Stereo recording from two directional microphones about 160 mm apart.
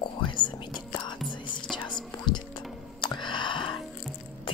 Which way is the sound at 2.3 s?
30° left (ahead or behind).